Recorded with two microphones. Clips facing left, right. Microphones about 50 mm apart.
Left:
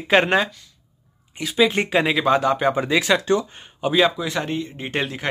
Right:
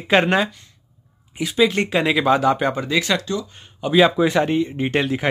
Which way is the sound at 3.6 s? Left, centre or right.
Centre.